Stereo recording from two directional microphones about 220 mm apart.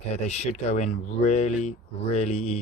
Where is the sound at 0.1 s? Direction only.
30° left (ahead or behind).